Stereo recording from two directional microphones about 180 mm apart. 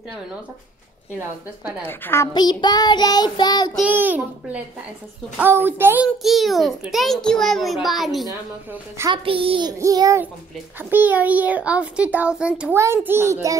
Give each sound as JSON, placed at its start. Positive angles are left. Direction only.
{"t": 1.9, "sound": "a woman's voice", "side_deg": 10}
{"t": 2.3, "sound": "child singing", "side_deg": 25}
{"t": 3.7, "sound": "a child's voice", "side_deg": -10}
{"t": 6.2, "sound": "a child's voice", "side_deg": 0}
{"t": 9.1, "sound": "child singing", "side_deg": -30}
{"t": 10.9, "sound": "a child's voice", "side_deg": -10}